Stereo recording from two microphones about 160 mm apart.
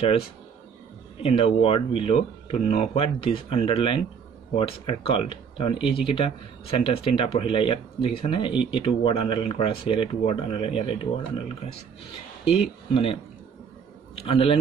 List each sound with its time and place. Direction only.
1.2 s speech: 35° left (ahead or behind)
12.4 s a man's voice: 35° left (ahead or behind)